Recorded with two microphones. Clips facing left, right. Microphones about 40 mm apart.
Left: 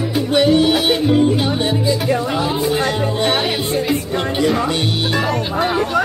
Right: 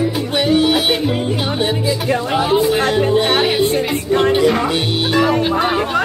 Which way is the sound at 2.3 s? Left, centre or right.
Right.